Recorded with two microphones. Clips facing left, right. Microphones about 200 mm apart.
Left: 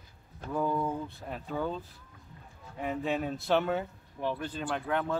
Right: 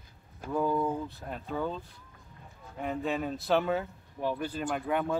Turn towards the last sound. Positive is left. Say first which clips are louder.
# right 1 dB
turn(degrees=-10)  # may be behind; listen again after turning